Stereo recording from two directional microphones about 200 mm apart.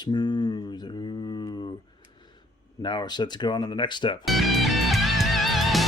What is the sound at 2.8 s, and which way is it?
Speech, 20° left (ahead or behind).